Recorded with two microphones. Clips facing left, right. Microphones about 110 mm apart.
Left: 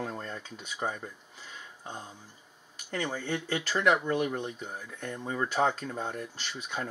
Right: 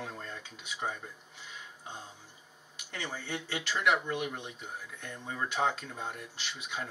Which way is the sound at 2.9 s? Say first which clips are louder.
Left 6 dB; 40° left (ahead or behind).